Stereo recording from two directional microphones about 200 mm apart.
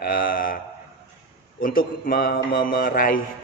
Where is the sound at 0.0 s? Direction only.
45° left (ahead or behind).